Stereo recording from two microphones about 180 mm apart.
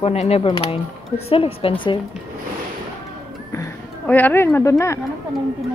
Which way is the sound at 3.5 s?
15° left (ahead or behind).